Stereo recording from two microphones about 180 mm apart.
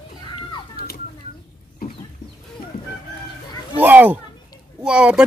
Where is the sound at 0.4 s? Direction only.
25° left (ahead or behind).